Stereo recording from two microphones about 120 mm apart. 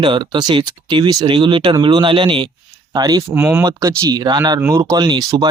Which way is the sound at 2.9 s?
35° right (ahead or behind).